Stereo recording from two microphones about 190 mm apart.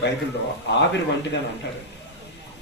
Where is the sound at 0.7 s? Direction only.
65° left (ahead or behind).